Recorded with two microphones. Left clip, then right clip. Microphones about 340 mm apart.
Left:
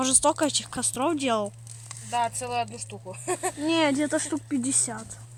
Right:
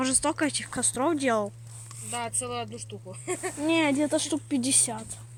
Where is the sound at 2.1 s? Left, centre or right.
Left.